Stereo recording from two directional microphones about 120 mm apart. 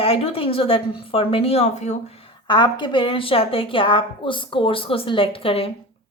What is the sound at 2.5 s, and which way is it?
A woman's voice, 40° left (ahead or behind).